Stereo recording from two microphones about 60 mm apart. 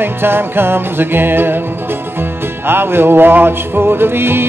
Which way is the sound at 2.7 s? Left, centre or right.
Right.